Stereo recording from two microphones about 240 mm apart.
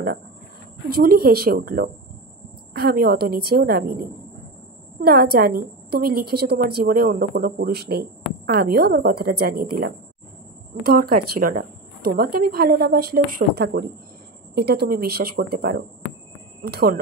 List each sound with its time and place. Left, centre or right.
0.8 s a woman's voice: right
5.0 s a woman's voice: right